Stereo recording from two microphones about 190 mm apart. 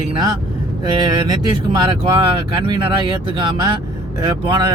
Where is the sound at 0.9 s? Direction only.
25° right (ahead or behind).